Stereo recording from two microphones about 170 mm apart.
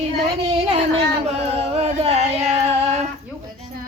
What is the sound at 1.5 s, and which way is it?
Music, 35° right (ahead or behind).